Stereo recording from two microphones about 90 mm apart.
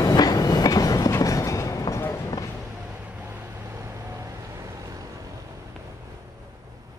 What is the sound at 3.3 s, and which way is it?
Vehicle, 25° right (ahead or behind).